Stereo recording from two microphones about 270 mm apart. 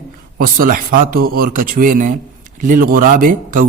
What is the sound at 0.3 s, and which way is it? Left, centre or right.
Speech, right.